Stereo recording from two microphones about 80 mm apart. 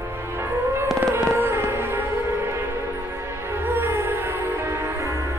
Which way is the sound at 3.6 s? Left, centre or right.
Right.